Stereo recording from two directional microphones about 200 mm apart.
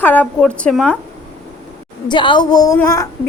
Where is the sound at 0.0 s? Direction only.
10° left (ahead or behind).